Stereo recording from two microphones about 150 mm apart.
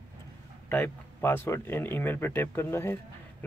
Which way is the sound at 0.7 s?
15° left (ahead or behind).